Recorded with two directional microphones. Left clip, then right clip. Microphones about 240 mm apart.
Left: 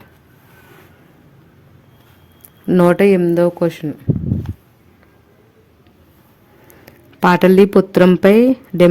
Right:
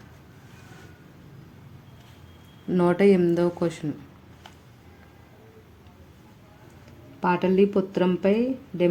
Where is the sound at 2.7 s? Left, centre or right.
Left.